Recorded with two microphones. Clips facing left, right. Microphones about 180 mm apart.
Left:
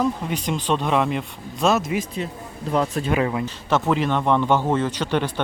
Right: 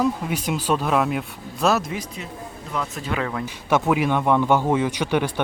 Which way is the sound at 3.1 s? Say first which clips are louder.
Left 4 dB; 20° left (ahead or behind).